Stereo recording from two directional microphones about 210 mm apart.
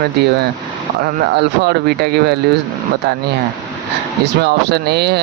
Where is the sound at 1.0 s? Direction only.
55° right (ahead or behind).